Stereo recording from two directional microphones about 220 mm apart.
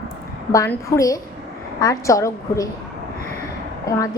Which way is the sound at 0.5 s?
15° left (ahead or behind).